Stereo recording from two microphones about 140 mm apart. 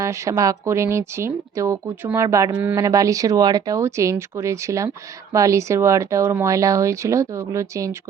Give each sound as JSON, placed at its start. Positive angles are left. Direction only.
{"t": 0.0, "sound": "speech", "side_deg": -20}